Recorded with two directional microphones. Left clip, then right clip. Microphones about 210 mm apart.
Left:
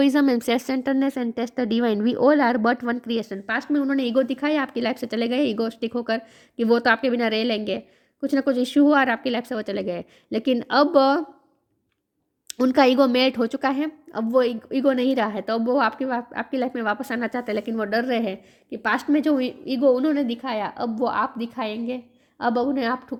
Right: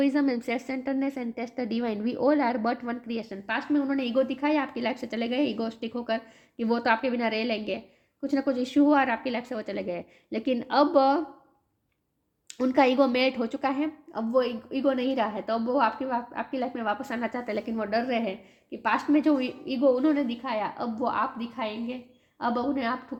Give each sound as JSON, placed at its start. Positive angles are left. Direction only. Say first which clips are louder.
{"t": 0.0, "sound": "a woman's voice", "louder": "left 6 dB", "side_deg": 45}
{"t": 12.5, "sound": "a woman's voice", "louder": "left 5 dB", "side_deg": 45}